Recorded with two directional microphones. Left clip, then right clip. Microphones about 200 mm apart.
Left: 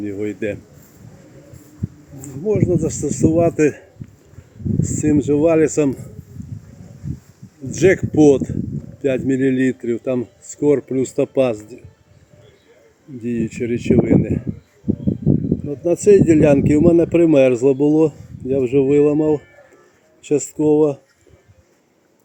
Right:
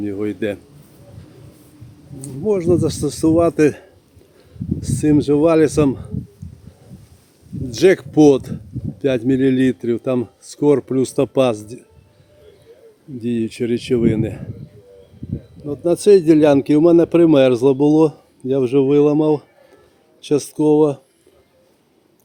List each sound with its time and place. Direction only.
0.0 s speech: 20° right (ahead or behind)
2.4 s speech: 15° right (ahead or behind)
7.8 s speech: 15° right (ahead or behind)
8.1 s speech: 25° right (ahead or behind)
13.2 s speech: 15° right (ahead or behind)
15.7 s speech: 10° right (ahead or behind)